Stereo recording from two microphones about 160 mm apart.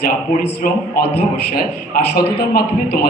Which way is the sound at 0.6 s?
55° left (ahead or behind).